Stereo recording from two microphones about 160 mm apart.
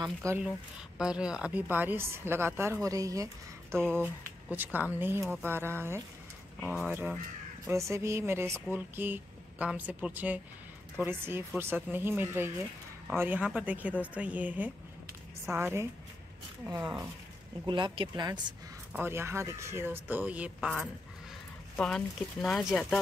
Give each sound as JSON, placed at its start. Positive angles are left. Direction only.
{"t": 0.0, "sound": "speech", "side_deg": -20}
{"t": 0.9, "sound": "speech", "side_deg": -5}
{"t": 3.7, "sound": "speech", "side_deg": 5}
{"t": 4.0, "sound": "speech", "side_deg": -10}
{"t": 17.6, "sound": "speech", "side_deg": -30}
{"t": 18.9, "sound": "speech", "side_deg": -15}